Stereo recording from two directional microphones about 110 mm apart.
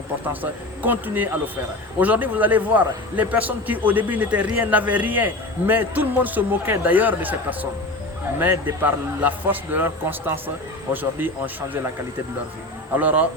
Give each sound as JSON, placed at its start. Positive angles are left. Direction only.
{"t": 0.8, "sound": "a man's voice", "side_deg": -15}
{"t": 13.0, "sound": "a man's voice", "side_deg": -15}